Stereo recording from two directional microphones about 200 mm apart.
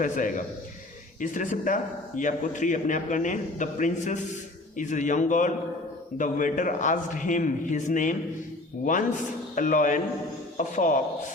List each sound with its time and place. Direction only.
0.0 s a man's voice: 40° left (ahead or behind)